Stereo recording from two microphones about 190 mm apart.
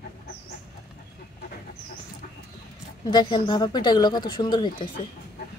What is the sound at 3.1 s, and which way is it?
Speech, 25° left (ahead or behind).